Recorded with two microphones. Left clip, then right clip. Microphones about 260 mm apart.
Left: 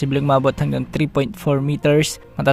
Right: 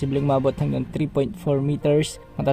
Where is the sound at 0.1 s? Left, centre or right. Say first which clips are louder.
Left 5 dB; left.